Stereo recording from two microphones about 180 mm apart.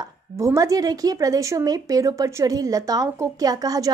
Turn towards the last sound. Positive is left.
turn(degrees=-20)  # may be behind; listen again after turning